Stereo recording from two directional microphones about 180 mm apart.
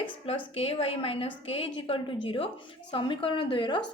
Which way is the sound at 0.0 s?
30° left (ahead or behind).